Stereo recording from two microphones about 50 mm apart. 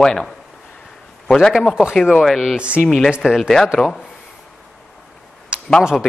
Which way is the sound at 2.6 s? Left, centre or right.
Right.